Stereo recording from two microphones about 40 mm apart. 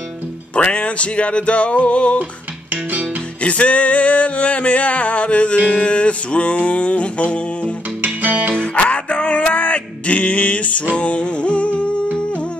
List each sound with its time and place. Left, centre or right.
0.6 s music: left
2.7 s music: right
3.4 s music: left
8.0 s music: right
8.7 s a sound: left
11.0 s music: left